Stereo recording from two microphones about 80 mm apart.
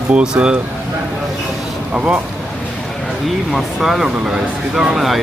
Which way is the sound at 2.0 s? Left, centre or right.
Centre.